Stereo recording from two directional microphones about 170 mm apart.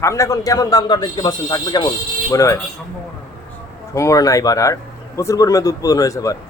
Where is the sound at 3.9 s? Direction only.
20° left (ahead or behind).